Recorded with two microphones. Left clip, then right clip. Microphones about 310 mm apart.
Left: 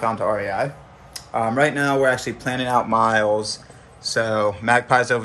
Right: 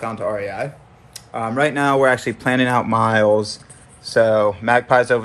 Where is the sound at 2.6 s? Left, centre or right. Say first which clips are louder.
Left 1 dB; right.